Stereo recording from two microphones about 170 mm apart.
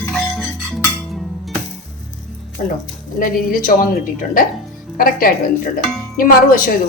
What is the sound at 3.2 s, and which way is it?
Speech, 55° left (ahead or behind).